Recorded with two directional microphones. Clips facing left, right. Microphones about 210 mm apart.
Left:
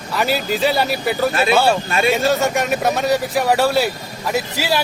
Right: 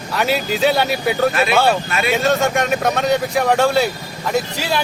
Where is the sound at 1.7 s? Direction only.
30° left (ahead or behind).